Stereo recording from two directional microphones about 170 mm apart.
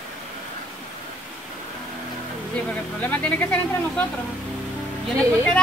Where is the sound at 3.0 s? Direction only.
10° left (ahead or behind).